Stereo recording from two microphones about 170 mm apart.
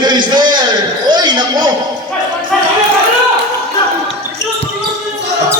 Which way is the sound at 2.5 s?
5° left (ahead or behind).